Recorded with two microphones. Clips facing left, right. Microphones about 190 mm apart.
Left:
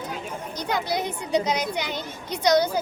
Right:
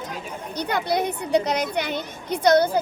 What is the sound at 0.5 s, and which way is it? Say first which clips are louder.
Speech: right 3 dB; 60° right (ahead or behind).